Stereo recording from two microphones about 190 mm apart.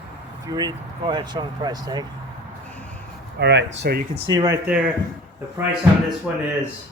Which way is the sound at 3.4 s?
65° right (ahead or behind).